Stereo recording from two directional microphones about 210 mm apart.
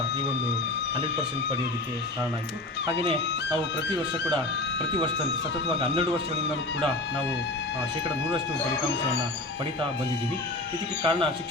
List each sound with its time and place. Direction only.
3.5 s speech: 15° right (ahead or behind)
5.6 s speech: 30° right (ahead or behind)
11.0 s speech: 25° right (ahead or behind)